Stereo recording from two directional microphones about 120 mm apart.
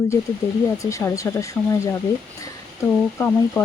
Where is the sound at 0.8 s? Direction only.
25° left (ahead or behind).